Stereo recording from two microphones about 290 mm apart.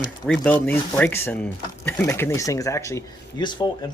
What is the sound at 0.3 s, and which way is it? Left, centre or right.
Speech, centre.